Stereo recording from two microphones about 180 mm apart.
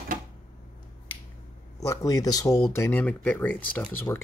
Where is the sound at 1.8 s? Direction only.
20° left (ahead or behind).